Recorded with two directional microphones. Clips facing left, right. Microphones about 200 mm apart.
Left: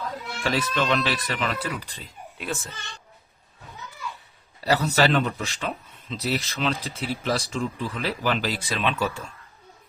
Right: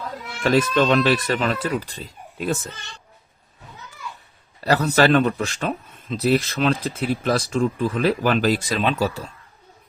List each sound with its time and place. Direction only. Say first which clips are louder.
0.5 s speech: right 7 dB; 45° right (ahead or behind)
4.6 s speech: right 4 dB; 55° right (ahead or behind); by 9.2 s 40° right (ahead or behind)